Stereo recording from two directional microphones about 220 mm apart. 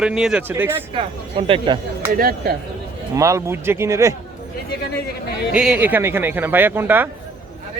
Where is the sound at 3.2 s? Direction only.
15° right (ahead or behind).